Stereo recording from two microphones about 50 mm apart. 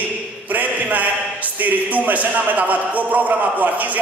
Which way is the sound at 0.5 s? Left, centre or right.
Right.